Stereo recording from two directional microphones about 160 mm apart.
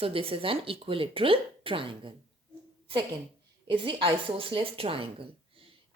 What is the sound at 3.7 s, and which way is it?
A woman's voice, 30° right (ahead or behind).